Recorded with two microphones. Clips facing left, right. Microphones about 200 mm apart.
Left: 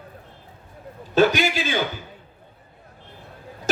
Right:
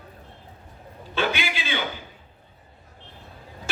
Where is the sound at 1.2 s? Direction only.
40° left (ahead or behind).